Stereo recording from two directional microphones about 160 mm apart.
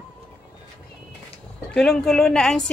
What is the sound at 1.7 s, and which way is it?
Speech, 5° left (ahead or behind).